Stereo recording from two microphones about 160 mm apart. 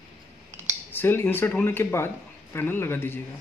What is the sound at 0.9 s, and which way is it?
Speech, 15° left (ahead or behind).